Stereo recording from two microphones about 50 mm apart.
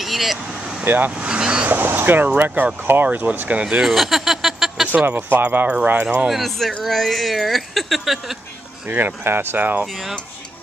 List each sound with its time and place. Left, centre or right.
0.0 s vehicle: centre
0.8 s speech: right
1.1 s vehicle: centre
1.7 s speech: right
3.8 s a sound: centre
5.0 s speech: right
6.2 s speech: centre
8.8 s speech: right